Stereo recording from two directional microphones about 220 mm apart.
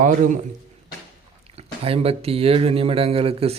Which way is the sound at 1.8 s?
25° right (ahead or behind).